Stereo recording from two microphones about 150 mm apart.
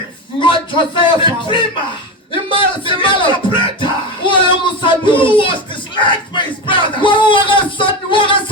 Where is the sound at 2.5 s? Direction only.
35° left (ahead or behind).